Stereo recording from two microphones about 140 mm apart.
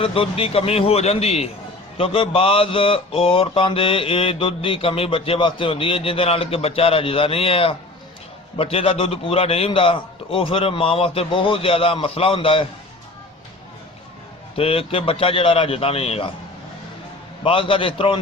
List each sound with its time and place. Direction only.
0.0 s a man's voice: 40° left (ahead or behind)
2.0 s mantra: 40° left (ahead or behind)
14.5 s mantra: 40° left (ahead or behind)
17.4 s mantra: 40° left (ahead or behind)